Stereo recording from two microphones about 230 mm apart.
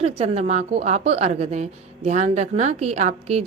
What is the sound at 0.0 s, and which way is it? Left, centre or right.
A woman's voice, right.